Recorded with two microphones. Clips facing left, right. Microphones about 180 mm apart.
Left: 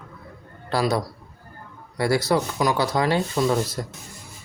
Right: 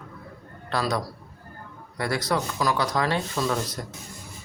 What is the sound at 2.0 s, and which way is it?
Speech, 30° left (ahead or behind).